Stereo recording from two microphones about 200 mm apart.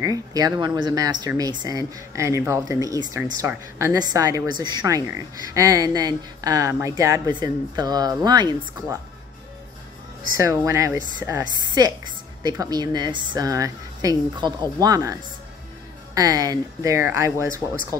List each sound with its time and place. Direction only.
0.0 s speech: 15° right (ahead or behind)
10.3 s speech: 15° right (ahead or behind)
16.2 s speech: 20° right (ahead or behind)